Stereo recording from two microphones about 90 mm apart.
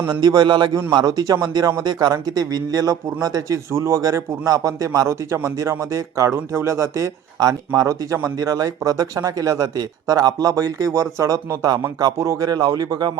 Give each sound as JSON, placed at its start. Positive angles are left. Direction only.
{"t": 0.1, "sound": "a man's voice", "side_deg": -55}
{"t": 3.7, "sound": "speech", "side_deg": -30}
{"t": 12.5, "sound": "speech", "side_deg": -45}